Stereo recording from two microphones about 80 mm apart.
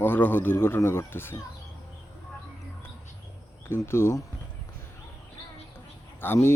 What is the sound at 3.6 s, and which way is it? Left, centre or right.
Speech, left.